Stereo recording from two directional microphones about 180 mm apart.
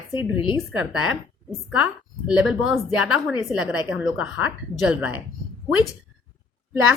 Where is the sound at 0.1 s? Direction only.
25° left (ahead or behind).